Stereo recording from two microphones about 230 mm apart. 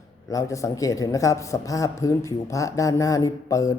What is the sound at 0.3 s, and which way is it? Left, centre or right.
A man's voice, centre.